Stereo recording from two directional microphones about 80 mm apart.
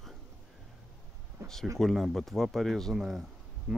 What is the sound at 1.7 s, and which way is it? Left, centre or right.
Speech, centre.